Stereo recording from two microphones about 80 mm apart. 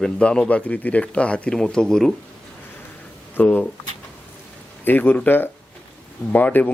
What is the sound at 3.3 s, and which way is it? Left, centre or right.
Speech, left.